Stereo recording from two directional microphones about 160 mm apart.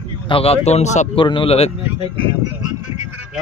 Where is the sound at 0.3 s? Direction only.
40° left (ahead or behind).